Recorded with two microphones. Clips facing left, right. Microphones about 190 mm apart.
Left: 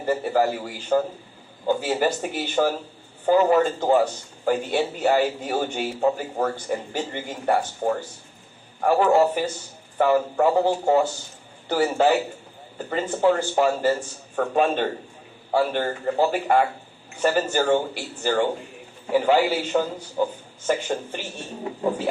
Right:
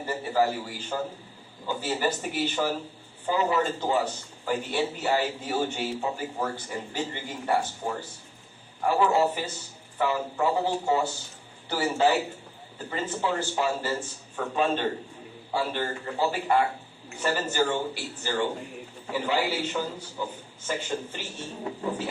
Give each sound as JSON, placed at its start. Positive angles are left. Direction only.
{"t": 0.0, "sound": "a man's voice", "side_deg": 50}